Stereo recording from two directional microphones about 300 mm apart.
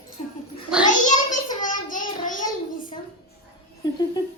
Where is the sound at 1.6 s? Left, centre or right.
Left.